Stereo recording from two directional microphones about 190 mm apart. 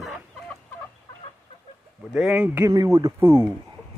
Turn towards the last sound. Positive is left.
turn(degrees=-15)  # may be behind; listen again after turning